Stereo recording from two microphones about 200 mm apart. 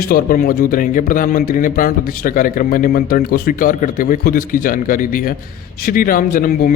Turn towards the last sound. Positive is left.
turn(degrees=45)  # may be behind; listen again after turning